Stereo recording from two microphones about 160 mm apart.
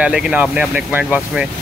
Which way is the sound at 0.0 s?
10° right (ahead or behind).